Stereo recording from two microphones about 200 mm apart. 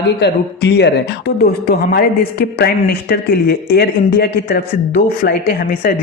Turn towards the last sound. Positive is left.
turn(degrees=50)  # may be behind; listen again after turning